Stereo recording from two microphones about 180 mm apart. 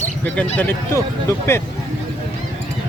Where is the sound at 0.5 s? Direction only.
10° left (ahead or behind).